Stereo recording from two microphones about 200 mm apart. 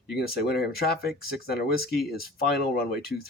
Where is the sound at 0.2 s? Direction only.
50° left (ahead or behind).